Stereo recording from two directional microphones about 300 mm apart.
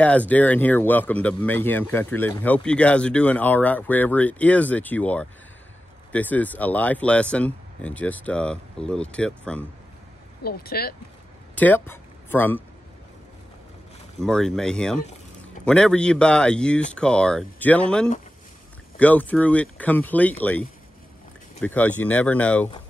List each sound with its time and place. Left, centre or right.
0.0 s speech: centre
10.4 s speech: left
11.5 s speech: centre
14.2 s speech: centre